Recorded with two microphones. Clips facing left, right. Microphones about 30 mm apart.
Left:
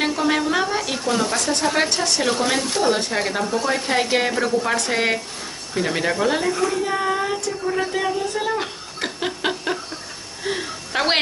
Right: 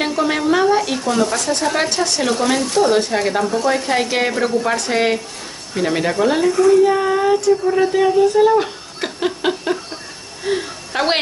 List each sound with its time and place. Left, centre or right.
0.0 s speech: centre
1.0 s speech: centre
10.4 s a sound: centre